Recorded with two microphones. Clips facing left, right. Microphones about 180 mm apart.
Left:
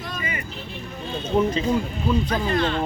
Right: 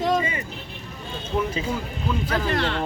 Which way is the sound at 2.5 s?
70° right (ahead or behind).